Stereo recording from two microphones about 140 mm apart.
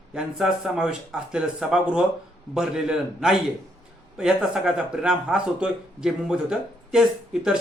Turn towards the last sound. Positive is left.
turn(degrees=-5)  # may be behind; listen again after turning